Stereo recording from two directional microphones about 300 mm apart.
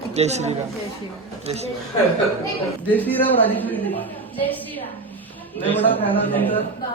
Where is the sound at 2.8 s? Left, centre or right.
Centre.